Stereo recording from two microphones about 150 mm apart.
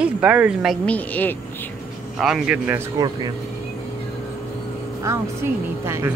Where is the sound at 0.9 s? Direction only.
10° left (ahead or behind).